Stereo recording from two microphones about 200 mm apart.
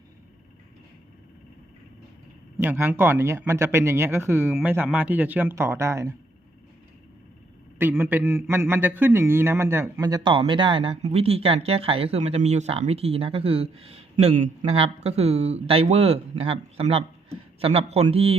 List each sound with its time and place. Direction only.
2.6 s speech: 10° right (ahead or behind)
7.8 s a man's voice: 10° right (ahead or behind); by 18.3 s 30° right (ahead or behind)